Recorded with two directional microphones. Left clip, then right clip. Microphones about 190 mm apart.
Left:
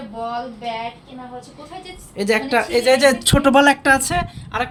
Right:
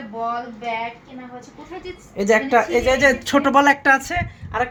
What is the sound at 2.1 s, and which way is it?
A woman's voice, 5° left (ahead or behind).